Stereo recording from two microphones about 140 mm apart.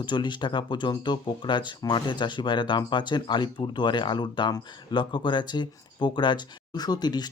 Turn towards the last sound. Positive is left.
turn(degrees=30)  # may be behind; listen again after turning